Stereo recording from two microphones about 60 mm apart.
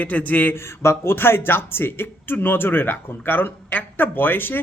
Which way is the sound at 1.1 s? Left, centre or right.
Left.